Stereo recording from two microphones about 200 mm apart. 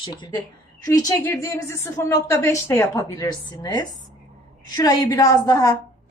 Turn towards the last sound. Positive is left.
turn(degrees=20)  # may be behind; listen again after turning